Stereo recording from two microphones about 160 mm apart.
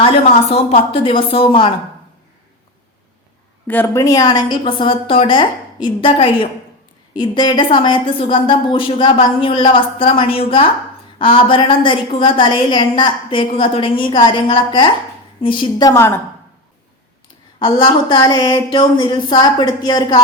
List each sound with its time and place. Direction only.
0.0 s a woman's voice: 40° left (ahead or behind)
3.7 s a woman's voice: 15° left (ahead or behind)
17.7 s speech: 30° left (ahead or behind)